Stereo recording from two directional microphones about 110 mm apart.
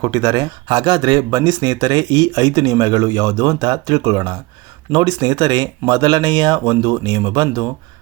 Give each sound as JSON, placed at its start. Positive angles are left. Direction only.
{"t": 0.0, "sound": "speech", "side_deg": -35}